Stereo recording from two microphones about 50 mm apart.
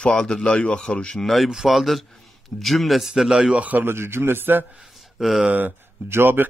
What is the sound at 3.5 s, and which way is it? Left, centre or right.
Speech, right.